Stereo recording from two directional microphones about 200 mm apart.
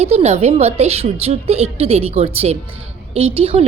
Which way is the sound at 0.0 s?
35° right (ahead or behind).